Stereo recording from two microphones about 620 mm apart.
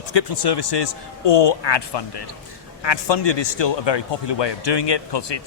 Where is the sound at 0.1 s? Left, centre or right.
Left.